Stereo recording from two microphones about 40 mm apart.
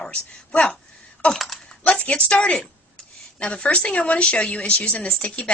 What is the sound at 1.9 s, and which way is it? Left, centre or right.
A woman's voice, left.